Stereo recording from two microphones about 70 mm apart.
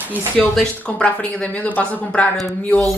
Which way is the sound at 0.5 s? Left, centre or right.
Centre.